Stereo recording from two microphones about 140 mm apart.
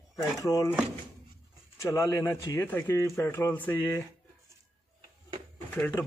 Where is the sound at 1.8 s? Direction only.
20° left (ahead or behind).